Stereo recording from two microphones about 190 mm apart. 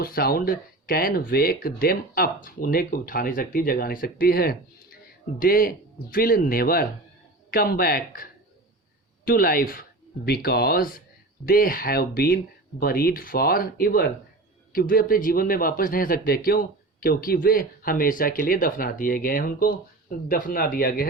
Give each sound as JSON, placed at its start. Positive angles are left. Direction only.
{"t": 0.0, "sound": "speech", "side_deg": 50}